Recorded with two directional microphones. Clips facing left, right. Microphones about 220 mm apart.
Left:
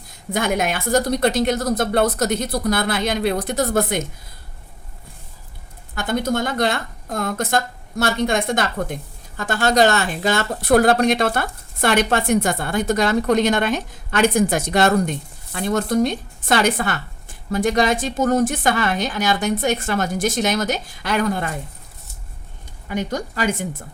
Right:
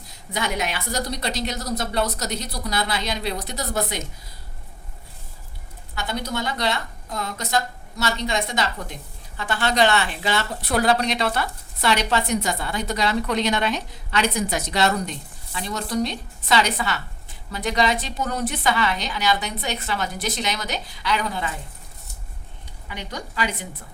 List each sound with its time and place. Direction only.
0.3 s speech: 50° left (ahead or behind)
5.9 s speech: 50° left (ahead or behind)
22.9 s speech: 45° left (ahead or behind)